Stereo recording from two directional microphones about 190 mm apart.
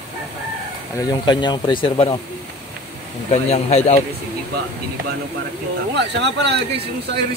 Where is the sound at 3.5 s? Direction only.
35° left (ahead or behind).